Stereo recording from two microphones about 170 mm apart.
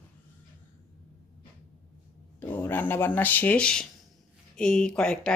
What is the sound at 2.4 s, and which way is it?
Speech, 10° left (ahead or behind).